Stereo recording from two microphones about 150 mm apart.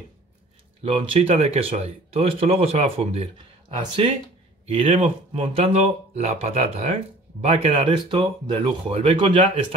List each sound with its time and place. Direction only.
0.9 s speech: 40° right (ahead or behind)
7.9 s speech: 30° right (ahead or behind)